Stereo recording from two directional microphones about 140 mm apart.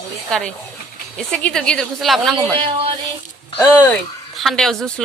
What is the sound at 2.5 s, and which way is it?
Speech, 40° right (ahead or behind).